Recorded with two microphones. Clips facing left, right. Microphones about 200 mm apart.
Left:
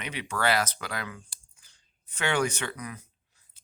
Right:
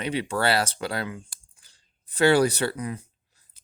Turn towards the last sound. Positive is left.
turn(degrees=-30)  # may be behind; listen again after turning